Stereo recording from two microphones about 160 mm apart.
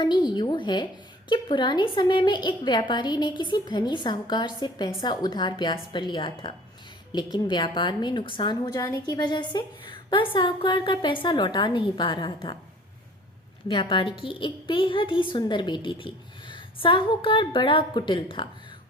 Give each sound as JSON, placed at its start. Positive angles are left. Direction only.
{"t": 0.0, "sound": "a woman's voice", "side_deg": 25}
{"t": 13.7, "sound": "a woman's voice", "side_deg": 30}